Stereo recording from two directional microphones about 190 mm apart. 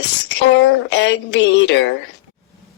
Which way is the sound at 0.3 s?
70° left (ahead or behind).